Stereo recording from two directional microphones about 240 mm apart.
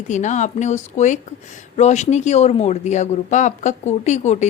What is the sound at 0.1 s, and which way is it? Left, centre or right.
A woman's voice, left.